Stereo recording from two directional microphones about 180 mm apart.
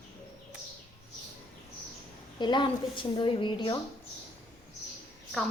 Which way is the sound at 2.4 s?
25° left (ahead or behind).